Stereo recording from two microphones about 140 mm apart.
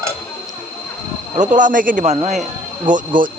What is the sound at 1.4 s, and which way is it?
Speech, 65° right (ahead or behind).